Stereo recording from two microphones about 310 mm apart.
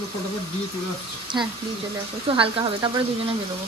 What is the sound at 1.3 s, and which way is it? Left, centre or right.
Speech, centre.